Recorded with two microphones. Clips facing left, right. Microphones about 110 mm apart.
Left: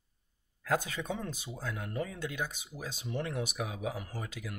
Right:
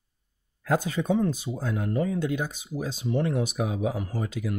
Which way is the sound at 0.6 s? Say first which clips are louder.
Right 7 dB; 30° right (ahead or behind).